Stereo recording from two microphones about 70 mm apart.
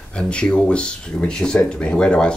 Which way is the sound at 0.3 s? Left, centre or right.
Centre.